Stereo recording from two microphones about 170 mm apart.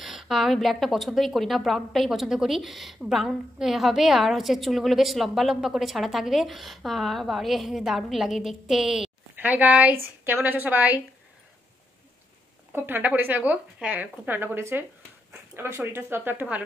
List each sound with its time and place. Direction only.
0.0 s a woman's voice: centre (ahead or behind)
12.7 s speech: 10° right (ahead or behind)